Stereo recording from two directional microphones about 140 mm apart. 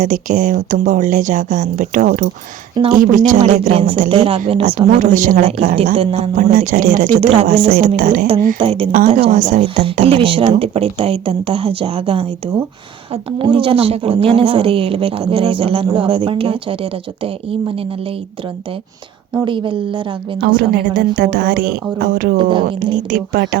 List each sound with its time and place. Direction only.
0.0 s speech: 65° right (ahead or behind)
3.7 s a woman's voice: 45° right (ahead or behind)
4.9 s speech: 65° right (ahead or behind)
5.8 s a woman's voice: 50° right (ahead or behind)
6.1 s speech: 75° right (ahead or behind)
7.2 s a woman's voice: 45° right (ahead or behind)
7.7 s a woman's voice: 90° right
8.5 s a woman's voice: 45° right (ahead or behind)
9.3 s speech: 60° right (ahead or behind)
10.0 s a woman's voice: 40° right (ahead or behind)
19.5 s speech: 35° right (ahead or behind)
20.6 s a woman's voice: 90° right
22.4 s speech: 35° right (ahead or behind)
22.6 s a woman's voice: 90° right